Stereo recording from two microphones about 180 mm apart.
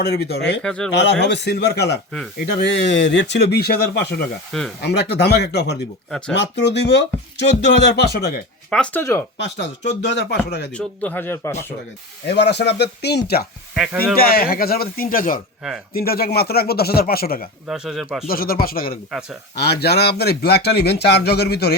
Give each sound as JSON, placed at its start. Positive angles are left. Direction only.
{"t": 0.0, "sound": "speech", "side_deg": 65}
{"t": 0.6, "sound": "speech", "side_deg": 5}
{"t": 0.9, "sound": "a man's voice", "side_deg": 75}
{"t": 6.1, "sound": "speech", "side_deg": 5}
{"t": 6.3, "sound": "speech", "side_deg": 75}
{"t": 8.7, "sound": "speech", "side_deg": 5}
{"t": 9.4, "sound": "speech", "side_deg": 75}
{"t": 10.7, "sound": "speech", "side_deg": 10}
{"t": 12.3, "sound": "a man's voice", "side_deg": 70}
{"t": 13.7, "sound": "speech", "side_deg": -5}
{"t": 14.2, "sound": "a man's voice", "side_deg": 60}
{"t": 17.7, "sound": "speech", "side_deg": 0}
{"t": 18.3, "sound": "a man's voice", "side_deg": 55}